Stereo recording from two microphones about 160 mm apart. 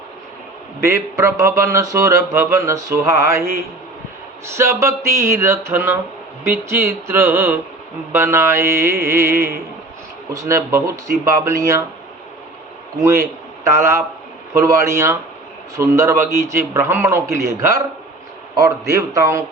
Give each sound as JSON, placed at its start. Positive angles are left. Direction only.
{"t": 0.8, "sound": "speech", "side_deg": -15}
{"t": 4.5, "sound": "speech", "side_deg": -15}
{"t": 13.0, "sound": "a man's voice", "side_deg": -20}